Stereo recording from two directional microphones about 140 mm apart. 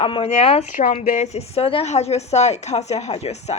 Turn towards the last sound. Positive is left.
turn(degrees=50)  # may be behind; listen again after turning